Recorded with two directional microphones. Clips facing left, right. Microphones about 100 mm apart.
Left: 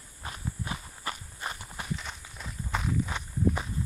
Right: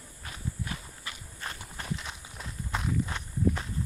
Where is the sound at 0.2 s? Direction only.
25° left (ahead or behind).